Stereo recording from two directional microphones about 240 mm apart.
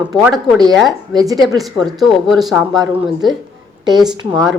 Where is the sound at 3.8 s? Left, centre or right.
Centre.